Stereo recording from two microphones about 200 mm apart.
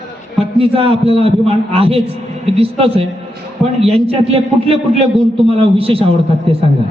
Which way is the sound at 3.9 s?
30° right (ahead or behind).